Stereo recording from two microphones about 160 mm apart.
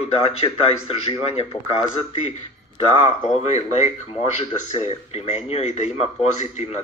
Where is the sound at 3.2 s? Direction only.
45° left (ahead or behind).